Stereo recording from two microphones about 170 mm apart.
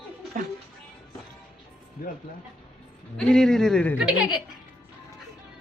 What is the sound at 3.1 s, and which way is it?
Speech, 5° left (ahead or behind).